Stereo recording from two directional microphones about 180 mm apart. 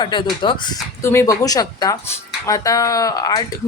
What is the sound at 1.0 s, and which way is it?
Speech, 15° left (ahead or behind).